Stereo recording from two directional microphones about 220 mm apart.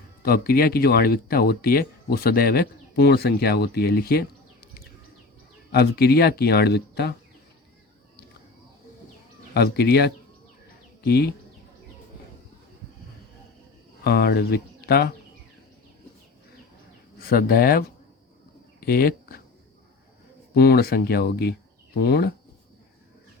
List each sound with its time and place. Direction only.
0.2 s speech: 45° left (ahead or behind)
9.6 s speech: 45° left (ahead or behind)
14.0 s speech: 45° left (ahead or behind)
17.2 s speech: 45° left (ahead or behind)
18.8 s a sound: 40° left (ahead or behind)
20.5 s speech: 45° left (ahead or behind)